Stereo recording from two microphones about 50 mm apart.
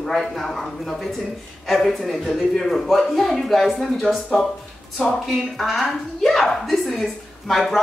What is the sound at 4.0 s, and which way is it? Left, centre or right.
Speech, centre.